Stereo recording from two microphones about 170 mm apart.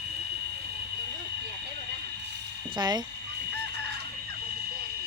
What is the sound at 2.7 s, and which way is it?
Speech, 25° right (ahead or behind).